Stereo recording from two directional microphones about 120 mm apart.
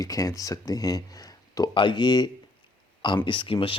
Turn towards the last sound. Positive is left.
turn(degrees=45)  # may be behind; listen again after turning